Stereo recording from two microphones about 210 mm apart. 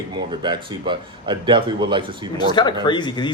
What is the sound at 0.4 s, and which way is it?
A man's voice, 20° right (ahead or behind).